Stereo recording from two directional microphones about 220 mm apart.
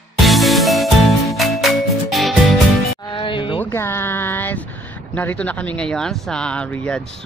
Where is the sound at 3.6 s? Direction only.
10° left (ahead or behind).